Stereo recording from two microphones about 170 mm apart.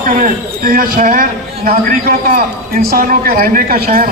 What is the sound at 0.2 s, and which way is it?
A man's voice, 60° right (ahead or behind).